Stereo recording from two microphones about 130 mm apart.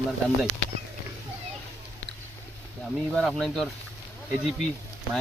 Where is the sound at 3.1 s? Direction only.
Centre (ahead or behind).